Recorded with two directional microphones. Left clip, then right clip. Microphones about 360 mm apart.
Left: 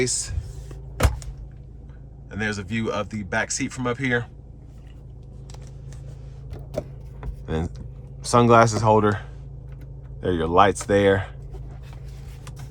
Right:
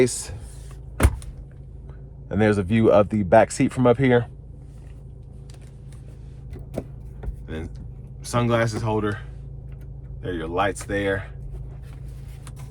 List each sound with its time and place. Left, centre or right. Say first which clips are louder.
0.0 s speech: right 4 dB; centre
2.3 s speech: right 7 dB; centre
7.4 s vehicle: left 6 dB; centre
8.2 s speech: left 7 dB; centre